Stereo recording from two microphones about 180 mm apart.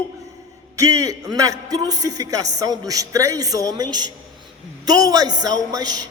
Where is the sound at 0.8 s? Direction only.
20° right (ahead or behind).